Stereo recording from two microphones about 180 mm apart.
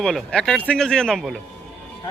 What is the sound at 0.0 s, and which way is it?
Speech, 5° left (ahead or behind).